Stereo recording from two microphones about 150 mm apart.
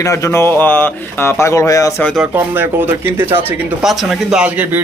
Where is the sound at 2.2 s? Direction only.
15° right (ahead or behind).